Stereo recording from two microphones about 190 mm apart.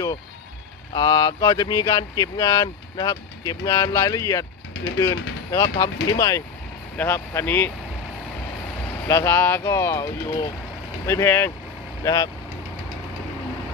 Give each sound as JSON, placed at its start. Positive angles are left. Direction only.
{"t": 0.9, "sound": "speech", "side_deg": 20}
{"t": 9.0, "sound": "speech", "side_deg": 15}